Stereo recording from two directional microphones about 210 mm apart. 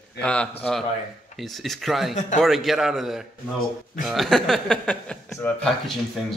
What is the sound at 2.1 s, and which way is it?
Speech, 35° left (ahead or behind).